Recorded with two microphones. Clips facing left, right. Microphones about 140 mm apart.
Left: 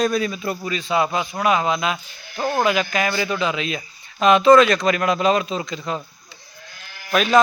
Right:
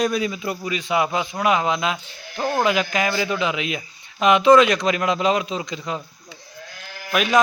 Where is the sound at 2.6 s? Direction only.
20° right (ahead or behind).